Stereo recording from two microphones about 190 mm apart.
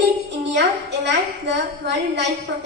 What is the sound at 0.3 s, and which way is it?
A woman's voice, 65° right (ahead or behind).